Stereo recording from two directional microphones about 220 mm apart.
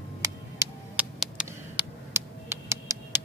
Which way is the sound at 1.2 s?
5° right (ahead or behind).